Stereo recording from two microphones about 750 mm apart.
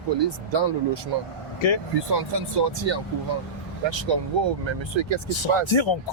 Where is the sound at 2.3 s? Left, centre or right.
Right.